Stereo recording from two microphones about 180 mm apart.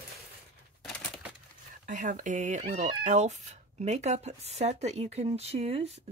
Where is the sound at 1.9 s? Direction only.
45° right (ahead or behind).